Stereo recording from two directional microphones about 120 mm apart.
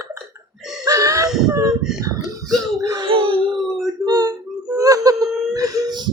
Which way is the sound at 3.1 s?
50° right (ahead or behind).